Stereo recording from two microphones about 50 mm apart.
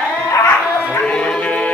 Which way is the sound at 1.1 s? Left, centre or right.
Centre.